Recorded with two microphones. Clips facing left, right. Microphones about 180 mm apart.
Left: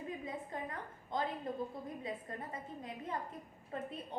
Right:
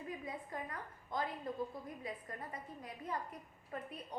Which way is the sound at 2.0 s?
25° left (ahead or behind).